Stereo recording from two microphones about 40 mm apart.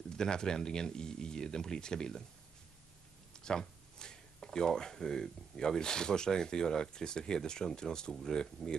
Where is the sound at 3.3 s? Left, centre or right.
Centre.